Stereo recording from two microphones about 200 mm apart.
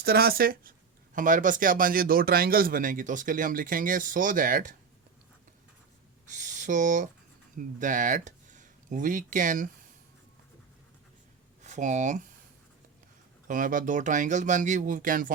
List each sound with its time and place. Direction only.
0.0 s speech: 50° right (ahead or behind)
6.2 s speech: 40° right (ahead or behind)
11.6 s speech: 35° right (ahead or behind)
13.5 s speech: 40° right (ahead or behind)